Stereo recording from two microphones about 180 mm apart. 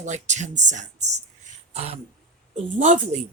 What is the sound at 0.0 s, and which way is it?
Speech, 40° right (ahead or behind).